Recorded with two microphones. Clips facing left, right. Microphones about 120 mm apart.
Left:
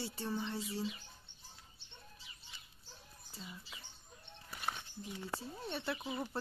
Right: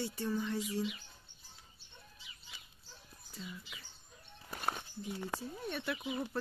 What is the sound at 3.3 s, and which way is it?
Speech, 35° left (ahead or behind).